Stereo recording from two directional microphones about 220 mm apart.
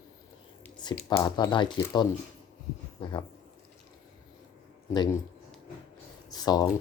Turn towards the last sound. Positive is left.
turn(degrees=15)  # may be behind; listen again after turning